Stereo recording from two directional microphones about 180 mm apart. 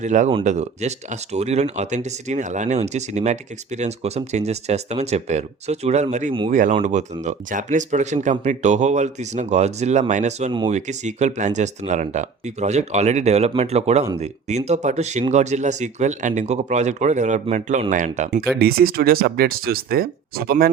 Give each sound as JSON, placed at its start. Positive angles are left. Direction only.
{"t": 0.0, "sound": "speech", "side_deg": -40}
{"t": 18.6, "sound": "speech", "side_deg": -55}